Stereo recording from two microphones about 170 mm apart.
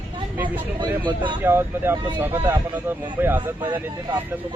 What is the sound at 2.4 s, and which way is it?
Speech, 25° right (ahead or behind).